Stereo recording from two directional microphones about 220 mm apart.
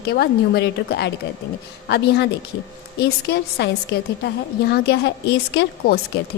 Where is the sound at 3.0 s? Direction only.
50° left (ahead or behind).